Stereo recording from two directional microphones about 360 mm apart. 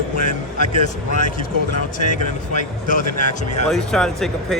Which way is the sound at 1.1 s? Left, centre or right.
Left.